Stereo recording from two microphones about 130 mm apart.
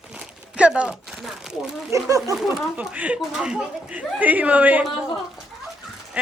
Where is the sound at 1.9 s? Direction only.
25° right (ahead or behind).